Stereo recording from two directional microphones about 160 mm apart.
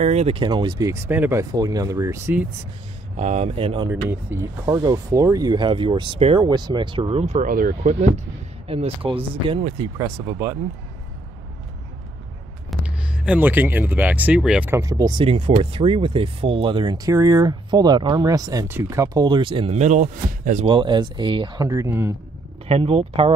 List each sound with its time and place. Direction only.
0.0 s speech: 40° right (ahead or behind); by 1.4 s 10° right (ahead or behind)
1.4 s speech: 20° right (ahead or behind)
3.2 s speech: 45° right (ahead or behind)
3.9 s speech: 15° right (ahead or behind); by 7.3 s 40° right (ahead or behind)
7.3 s speech: 60° right (ahead or behind)
8.6 s speech: 35° right (ahead or behind)
9.9 s speech: 20° right (ahead or behind)
12.8 s speech: 5° right (ahead or behind); by 15.2 s 20° right (ahead or behind)
15.2 s speech: 40° right (ahead or behind)
20.6 s speech: 30° right (ahead or behind)
22.7 s speech: 40° right (ahead or behind)